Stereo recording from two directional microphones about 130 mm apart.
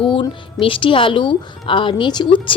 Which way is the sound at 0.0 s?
40° left (ahead or behind).